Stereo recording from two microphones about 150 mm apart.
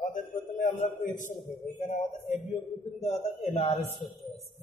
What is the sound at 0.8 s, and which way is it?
A man's voice, 55° left (ahead or behind).